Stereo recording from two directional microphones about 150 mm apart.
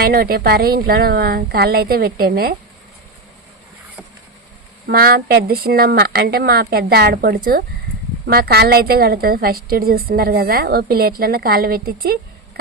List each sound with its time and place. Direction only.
0.0 s a woman's voice: 85° right
4.9 s a woman's voice: 85° right
8.3 s a woman's voice: 90° right